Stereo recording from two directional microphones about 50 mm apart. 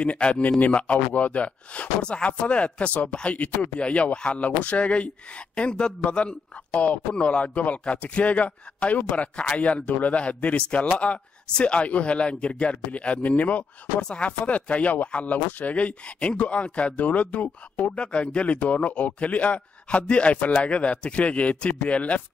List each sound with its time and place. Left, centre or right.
0.0 s speech: left